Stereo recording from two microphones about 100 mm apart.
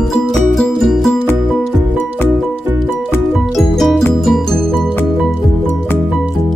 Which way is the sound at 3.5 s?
Centre (ahead or behind).